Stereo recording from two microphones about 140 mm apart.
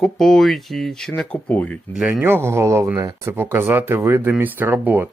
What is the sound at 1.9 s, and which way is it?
Speech, 5° right (ahead or behind).